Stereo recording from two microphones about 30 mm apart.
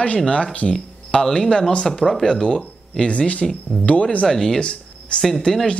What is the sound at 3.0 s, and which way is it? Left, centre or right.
Speech, left.